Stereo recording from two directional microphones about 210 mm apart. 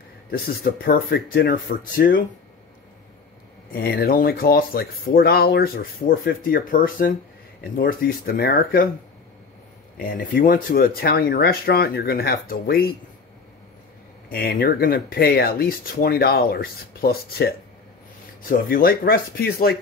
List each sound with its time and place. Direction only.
0.3 s speech: 45° left (ahead or behind)
3.8 s speech: 50° left (ahead or behind)
8.4 s speech: 45° left (ahead or behind)
9.9 s speech: 45° left (ahead or behind)
14.3 s speech: 45° left (ahead or behind)
18.5 s speech: 45° left (ahead or behind)